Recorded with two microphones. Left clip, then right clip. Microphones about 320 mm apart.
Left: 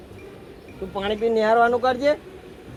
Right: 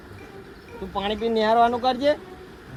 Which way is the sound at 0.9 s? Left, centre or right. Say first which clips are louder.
Left 2 dB; centre.